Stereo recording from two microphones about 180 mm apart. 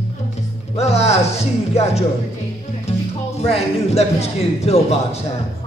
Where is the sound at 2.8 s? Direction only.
35° left (ahead or behind).